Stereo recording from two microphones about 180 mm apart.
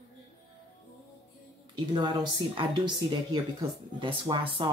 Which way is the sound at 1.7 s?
25° right (ahead or behind).